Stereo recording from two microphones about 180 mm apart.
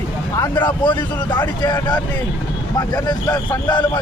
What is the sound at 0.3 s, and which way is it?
Speech, 20° left (ahead or behind).